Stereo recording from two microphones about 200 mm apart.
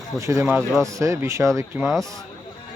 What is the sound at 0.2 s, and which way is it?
Speech, 15° right (ahead or behind).